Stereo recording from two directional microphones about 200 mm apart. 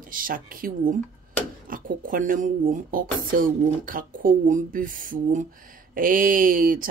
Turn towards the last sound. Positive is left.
turn(degrees=-45)  # may be behind; listen again after turning